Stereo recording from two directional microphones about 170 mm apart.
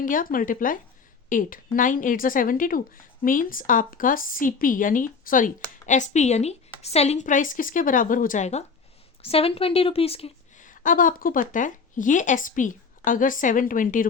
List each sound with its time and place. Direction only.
0.0 s speech: 55° left (ahead or behind); by 10.3 s 35° left (ahead or behind)
10.6 s speech: 50° left (ahead or behind)